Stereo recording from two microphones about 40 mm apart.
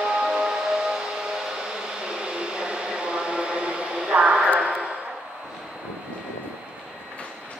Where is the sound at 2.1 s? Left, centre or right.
Right.